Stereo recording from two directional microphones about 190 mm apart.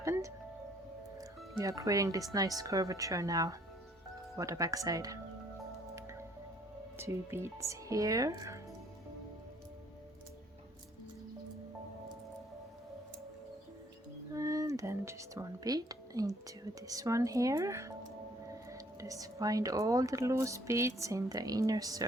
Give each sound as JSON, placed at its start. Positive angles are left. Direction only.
{"t": 0.0, "sound": "music", "side_deg": -15}
{"t": 1.2, "sound": "speech", "side_deg": -15}
{"t": 6.0, "sound": "squish", "side_deg": -15}
{"t": 7.0, "sound": "speech", "side_deg": -15}
{"t": 14.3, "sound": "a sound", "side_deg": -15}
{"t": 16.8, "sound": "speech", "side_deg": -15}